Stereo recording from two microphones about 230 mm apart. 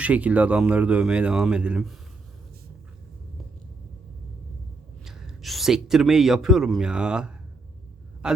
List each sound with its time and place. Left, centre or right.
0.0 s speech: centre
5.0 s speech: centre